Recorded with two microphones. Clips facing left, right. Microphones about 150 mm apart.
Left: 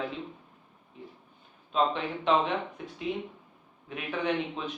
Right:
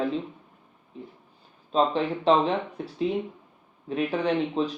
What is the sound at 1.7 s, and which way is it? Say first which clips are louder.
Speech: right 4 dB; 35° right (ahead or behind).